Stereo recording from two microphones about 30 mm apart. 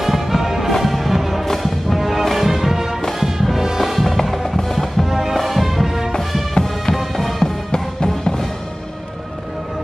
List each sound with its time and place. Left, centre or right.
0.0 s music: centre
6.5 s music: centre
7.2 s music: centre
7.4 s music: left